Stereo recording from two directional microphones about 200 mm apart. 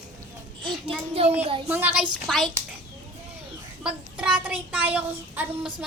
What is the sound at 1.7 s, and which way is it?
Speech, 10° right (ahead or behind).